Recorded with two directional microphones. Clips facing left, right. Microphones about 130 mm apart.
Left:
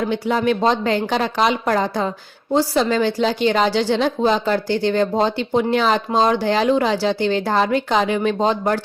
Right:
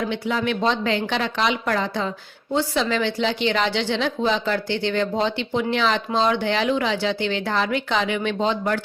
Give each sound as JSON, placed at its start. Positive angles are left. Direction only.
{"t": 0.0, "sound": "speech", "side_deg": 40}